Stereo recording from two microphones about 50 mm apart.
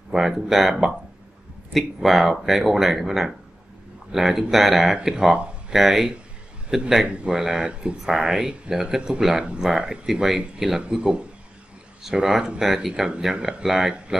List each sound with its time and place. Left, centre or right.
0.1 s speech: centre
5.1 s speech: centre
5.7 s speech: centre
7.1 s speech: right
7.3 s speech: centre
10.8 s speech: right